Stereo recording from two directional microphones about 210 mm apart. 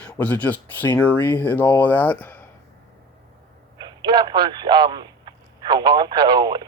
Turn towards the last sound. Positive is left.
turn(degrees=-20)  # may be behind; listen again after turning